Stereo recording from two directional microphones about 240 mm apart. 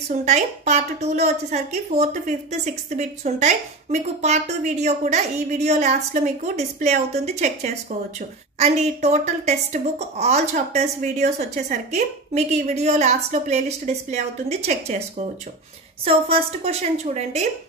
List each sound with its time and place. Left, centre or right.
0.1 s a woman's voice: right